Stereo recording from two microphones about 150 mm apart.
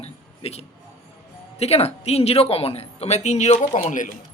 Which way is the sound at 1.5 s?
45° left (ahead or behind).